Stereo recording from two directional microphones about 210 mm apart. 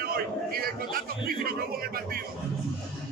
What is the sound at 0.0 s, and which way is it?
A man's voice, 45° right (ahead or behind).